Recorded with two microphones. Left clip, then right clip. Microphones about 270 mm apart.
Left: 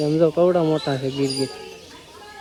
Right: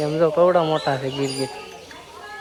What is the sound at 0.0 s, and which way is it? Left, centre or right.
Chicken, centre.